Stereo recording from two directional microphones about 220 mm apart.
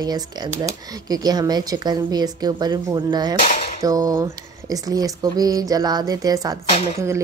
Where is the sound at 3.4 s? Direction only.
30° left (ahead or behind).